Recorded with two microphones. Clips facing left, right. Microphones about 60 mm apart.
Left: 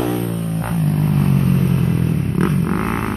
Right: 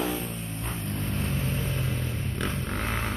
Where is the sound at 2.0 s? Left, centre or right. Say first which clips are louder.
Left 13 dB; left.